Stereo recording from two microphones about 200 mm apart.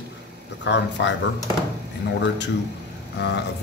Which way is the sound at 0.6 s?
60° left (ahead or behind).